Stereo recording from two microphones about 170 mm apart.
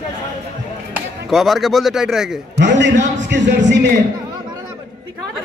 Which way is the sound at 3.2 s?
90° right.